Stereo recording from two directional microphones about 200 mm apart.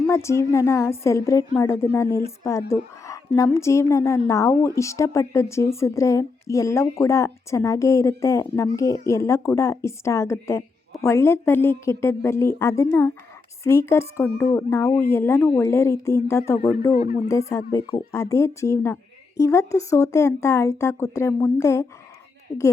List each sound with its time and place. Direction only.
0.1 s speech: 15° left (ahead or behind)
16.9 s speech: 50° left (ahead or behind)
17.5 s speech: 20° left (ahead or behind)
22.5 s a woman's voice: 35° left (ahead or behind)